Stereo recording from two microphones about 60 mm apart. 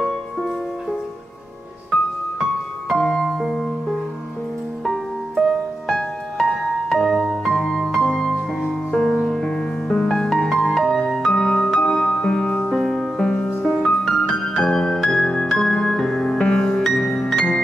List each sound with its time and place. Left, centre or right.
0.0 s music: centre
3.0 s music: centre
3.3 s music: centre
11.3 s music: centre
12.7 s music: centre